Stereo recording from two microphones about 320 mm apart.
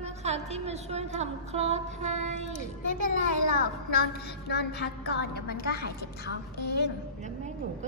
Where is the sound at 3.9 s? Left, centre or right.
Left.